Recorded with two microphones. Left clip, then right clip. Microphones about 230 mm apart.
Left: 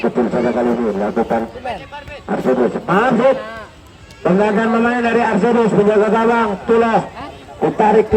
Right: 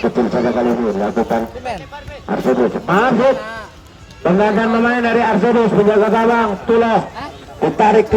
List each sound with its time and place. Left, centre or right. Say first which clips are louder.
0.0 s a man's voice: even; centre
3.3 s a man's voice: right 1 dB; right
4.2 s a man's voice: right 1 dB; centre
7.6 s speech: right 1 dB; right